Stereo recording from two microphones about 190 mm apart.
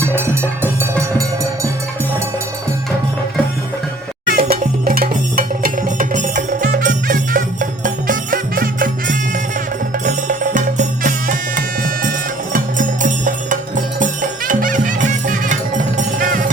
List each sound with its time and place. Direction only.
0.0 s music: 10° right (ahead or behind)
4.3 s music: 50° right (ahead or behind)